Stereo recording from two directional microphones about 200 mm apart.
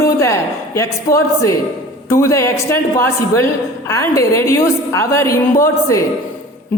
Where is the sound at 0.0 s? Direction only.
15° left (ahead or behind).